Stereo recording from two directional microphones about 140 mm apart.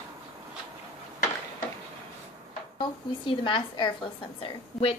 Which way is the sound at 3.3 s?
35° left (ahead or behind).